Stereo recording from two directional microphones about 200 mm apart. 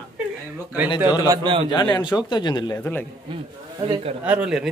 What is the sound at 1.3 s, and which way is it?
Speech, 25° right (ahead or behind).